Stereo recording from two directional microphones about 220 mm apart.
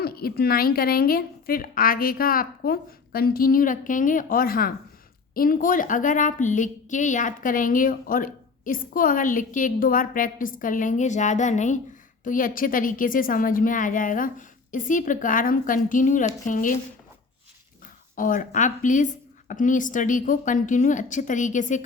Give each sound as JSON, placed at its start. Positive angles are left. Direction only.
{"t": 0.0, "sound": "a woman's voice", "side_deg": 45}
{"t": 18.2, "sound": "a woman's voice", "side_deg": 35}